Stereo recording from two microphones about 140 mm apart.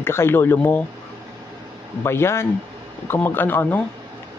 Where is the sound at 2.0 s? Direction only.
20° left (ahead or behind).